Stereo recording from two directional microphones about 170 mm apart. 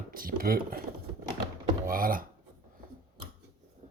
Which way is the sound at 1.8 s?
55° right (ahead or behind).